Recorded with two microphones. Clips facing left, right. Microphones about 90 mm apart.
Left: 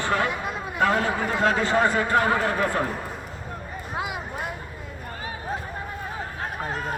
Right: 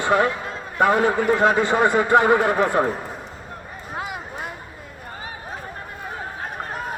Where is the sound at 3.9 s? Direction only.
5° left (ahead or behind).